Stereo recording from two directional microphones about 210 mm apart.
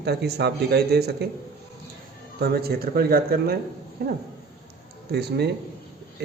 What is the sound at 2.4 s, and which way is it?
Speech, 50° right (ahead or behind).